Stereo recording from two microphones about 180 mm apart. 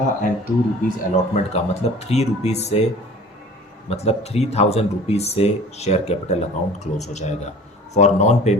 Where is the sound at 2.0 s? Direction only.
35° left (ahead or behind).